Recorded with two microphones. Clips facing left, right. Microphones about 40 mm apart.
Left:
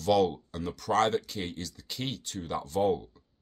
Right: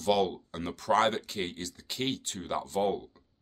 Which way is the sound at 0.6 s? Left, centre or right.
Right.